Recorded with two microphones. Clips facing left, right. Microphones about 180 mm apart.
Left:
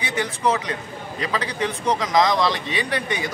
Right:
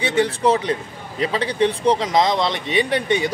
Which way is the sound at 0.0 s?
30° right (ahead or behind).